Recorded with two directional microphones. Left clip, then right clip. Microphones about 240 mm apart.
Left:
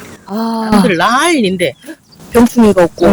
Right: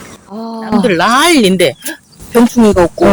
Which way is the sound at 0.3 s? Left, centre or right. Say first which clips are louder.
Left 7 dB; left.